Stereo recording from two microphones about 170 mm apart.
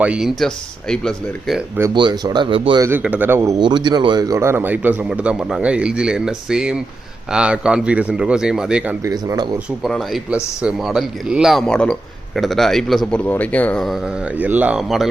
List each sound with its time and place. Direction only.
0.0 s speech: 5° right (ahead or behind)
1.9 s speech: 25° right (ahead or behind)
2.8 s speech: 10° right (ahead or behind)
9.0 s speech: 20° right (ahead or behind)
9.8 s speech: centre (ahead or behind)